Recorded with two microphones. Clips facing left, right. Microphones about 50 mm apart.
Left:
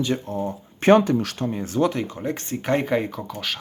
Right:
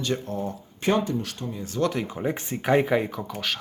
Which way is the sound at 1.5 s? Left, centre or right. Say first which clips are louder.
Left 6 dB; left.